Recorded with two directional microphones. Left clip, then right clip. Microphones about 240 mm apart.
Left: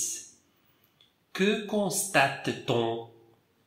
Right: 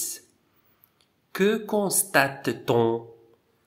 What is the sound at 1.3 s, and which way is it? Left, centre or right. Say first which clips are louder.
A man's voice: right 4 dB; right.